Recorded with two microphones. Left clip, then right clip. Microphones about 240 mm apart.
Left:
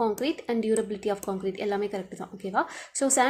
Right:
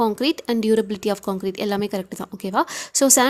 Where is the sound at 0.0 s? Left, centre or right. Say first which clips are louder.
Right 6 dB; right.